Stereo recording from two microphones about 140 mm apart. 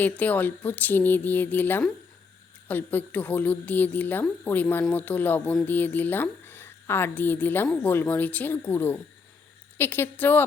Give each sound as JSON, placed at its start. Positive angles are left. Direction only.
{"t": 0.0, "sound": "a woman's voice", "side_deg": 10}